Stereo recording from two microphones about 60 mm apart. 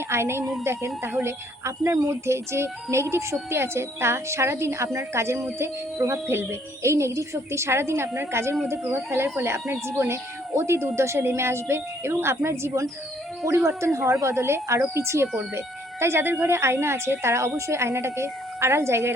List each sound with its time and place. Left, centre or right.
0.1 s speech: right